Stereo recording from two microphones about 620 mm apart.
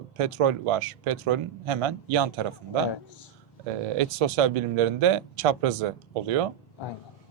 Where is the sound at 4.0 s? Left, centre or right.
Right.